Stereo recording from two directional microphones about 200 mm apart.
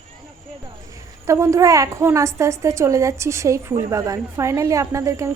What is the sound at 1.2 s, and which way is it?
A woman's voice, 15° right (ahead or behind).